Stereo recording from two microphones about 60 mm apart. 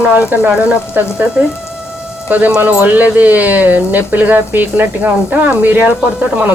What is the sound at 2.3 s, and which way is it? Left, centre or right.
Speech, right.